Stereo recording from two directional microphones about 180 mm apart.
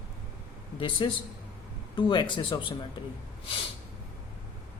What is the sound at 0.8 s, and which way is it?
Speech, 25° left (ahead or behind).